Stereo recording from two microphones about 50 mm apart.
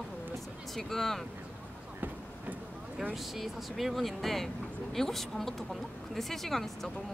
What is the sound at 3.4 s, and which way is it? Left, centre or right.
Speech, centre.